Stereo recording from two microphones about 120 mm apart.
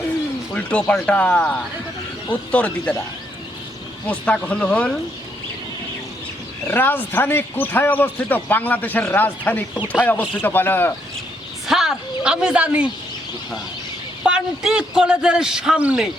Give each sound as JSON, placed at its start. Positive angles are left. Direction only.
{"t": 0.5, "sound": "speech", "side_deg": 10}
{"t": 4.0, "sound": "speech", "side_deg": 10}
{"t": 6.7, "sound": "speech", "side_deg": 15}
{"t": 11.6, "sound": "a woman's voice", "side_deg": -5}
{"t": 14.3, "sound": "a man's voice", "side_deg": -5}